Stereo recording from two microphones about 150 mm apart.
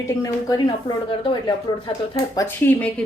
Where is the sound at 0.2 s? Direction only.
25° left (ahead or behind).